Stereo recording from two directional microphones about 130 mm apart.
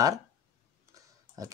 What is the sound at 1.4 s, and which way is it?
Speech, 25° right (ahead or behind).